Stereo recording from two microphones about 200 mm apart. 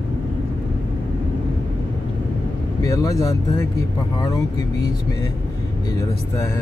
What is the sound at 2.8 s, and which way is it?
Speech, 15° left (ahead or behind).